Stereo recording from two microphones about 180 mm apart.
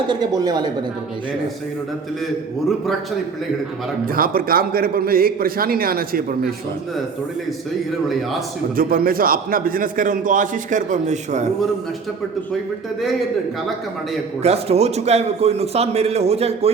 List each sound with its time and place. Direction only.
0.1 s a woman's voice: 20° right (ahead or behind)
4.0 s a man's voice: 55° right (ahead or behind)
8.7 s a man's voice: 55° right (ahead or behind)
14.4 s a man's voice: 35° right (ahead or behind)